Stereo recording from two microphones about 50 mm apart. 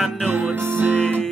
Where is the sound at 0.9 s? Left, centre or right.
Centre.